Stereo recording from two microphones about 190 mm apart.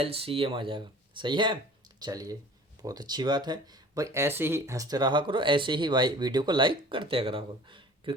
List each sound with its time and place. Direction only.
0.0 s speech: 30° right (ahead or behind)